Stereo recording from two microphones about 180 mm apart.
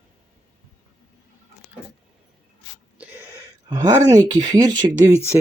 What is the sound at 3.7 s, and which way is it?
Speech, 20° right (ahead or behind).